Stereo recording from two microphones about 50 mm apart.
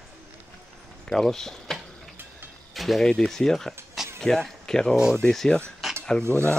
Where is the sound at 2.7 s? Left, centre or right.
Centre.